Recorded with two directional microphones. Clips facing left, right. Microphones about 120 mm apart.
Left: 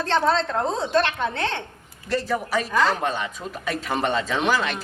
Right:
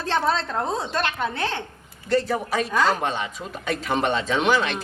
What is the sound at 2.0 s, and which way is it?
Speech, 30° right (ahead or behind).